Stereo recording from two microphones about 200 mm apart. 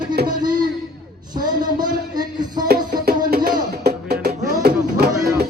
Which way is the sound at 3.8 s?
50° right (ahead or behind).